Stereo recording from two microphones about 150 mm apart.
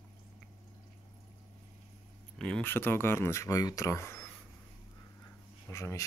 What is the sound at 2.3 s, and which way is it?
Speech, 5° left (ahead or behind).